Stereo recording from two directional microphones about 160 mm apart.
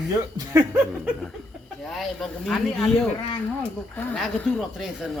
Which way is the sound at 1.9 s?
Centre (ahead or behind).